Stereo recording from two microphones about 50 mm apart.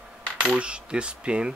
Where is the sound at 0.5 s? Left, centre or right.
Right.